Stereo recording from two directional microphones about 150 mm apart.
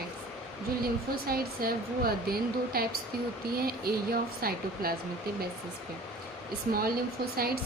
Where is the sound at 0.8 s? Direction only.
85° right.